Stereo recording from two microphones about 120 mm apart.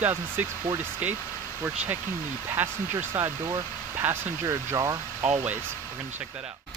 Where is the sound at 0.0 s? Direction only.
15° right (ahead or behind).